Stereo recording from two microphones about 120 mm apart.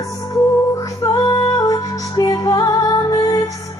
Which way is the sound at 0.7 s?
25° left (ahead or behind).